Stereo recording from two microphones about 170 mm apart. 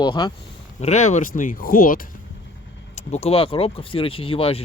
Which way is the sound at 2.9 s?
40° left (ahead or behind).